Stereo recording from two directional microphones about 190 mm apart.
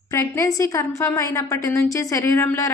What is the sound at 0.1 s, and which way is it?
A woman's voice, 15° left (ahead or behind).